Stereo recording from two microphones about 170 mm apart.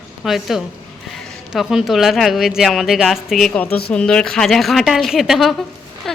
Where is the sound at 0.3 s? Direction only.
Centre (ahead or behind).